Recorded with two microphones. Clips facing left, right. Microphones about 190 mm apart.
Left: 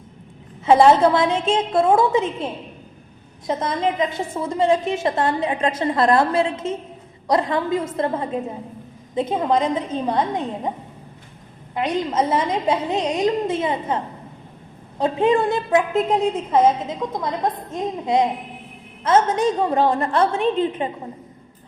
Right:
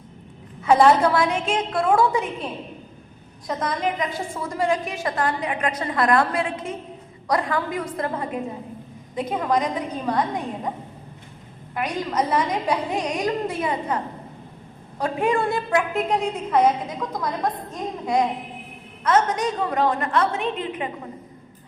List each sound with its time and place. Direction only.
0.6 s a woman's voice: 25° left (ahead or behind)
11.7 s a woman's voice: 25° left (ahead or behind)